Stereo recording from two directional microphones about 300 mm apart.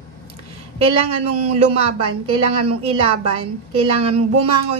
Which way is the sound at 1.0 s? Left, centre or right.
Right.